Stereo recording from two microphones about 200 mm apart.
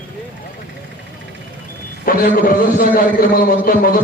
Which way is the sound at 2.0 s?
45° left (ahead or behind).